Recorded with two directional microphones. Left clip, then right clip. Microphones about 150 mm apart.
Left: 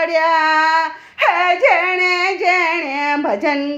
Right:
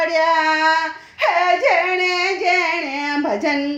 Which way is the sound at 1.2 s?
30° left (ahead or behind).